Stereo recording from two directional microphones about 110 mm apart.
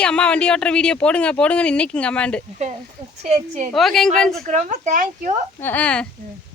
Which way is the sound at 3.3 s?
90° right.